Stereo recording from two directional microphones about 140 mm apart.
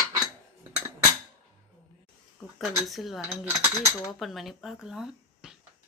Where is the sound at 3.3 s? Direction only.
15° right (ahead or behind).